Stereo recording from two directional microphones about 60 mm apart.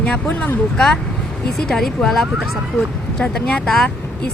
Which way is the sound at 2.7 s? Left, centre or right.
Centre.